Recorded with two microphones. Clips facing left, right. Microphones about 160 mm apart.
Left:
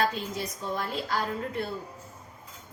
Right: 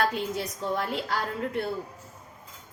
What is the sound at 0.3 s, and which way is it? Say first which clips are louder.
Speech: right 3 dB; 70° right (ahead or behind).